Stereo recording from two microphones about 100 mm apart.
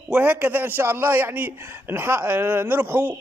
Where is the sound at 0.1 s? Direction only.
15° right (ahead or behind).